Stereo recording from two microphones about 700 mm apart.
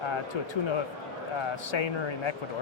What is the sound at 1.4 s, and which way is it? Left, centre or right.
Speech, left.